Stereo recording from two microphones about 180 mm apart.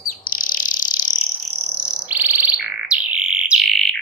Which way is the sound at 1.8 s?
5° right (ahead or behind).